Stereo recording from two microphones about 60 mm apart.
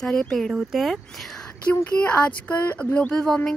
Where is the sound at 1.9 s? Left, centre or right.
Left.